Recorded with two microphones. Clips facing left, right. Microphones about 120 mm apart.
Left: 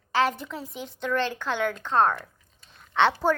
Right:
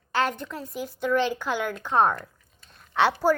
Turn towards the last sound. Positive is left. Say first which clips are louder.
# right 1 dB
turn(degrees=-5)  # may be behind; listen again after turning